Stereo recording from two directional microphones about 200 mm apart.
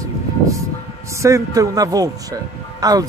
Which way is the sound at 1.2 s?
15° right (ahead or behind).